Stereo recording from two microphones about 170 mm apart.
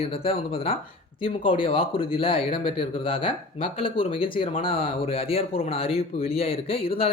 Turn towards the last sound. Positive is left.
turn(degrees=35)  # may be behind; listen again after turning